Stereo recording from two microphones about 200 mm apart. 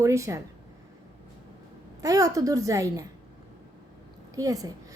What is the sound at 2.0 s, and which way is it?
A woman's voice, 15° right (ahead or behind).